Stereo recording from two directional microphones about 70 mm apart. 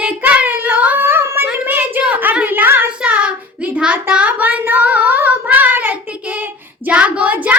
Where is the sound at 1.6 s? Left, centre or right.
Right.